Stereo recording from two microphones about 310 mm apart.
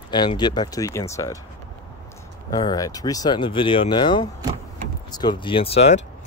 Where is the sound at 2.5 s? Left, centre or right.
Centre.